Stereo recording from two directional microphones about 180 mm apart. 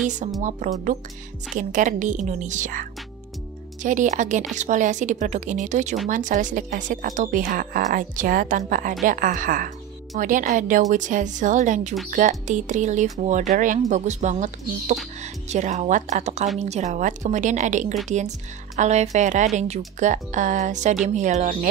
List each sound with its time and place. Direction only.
0.4 s speech: 45° right (ahead or behind)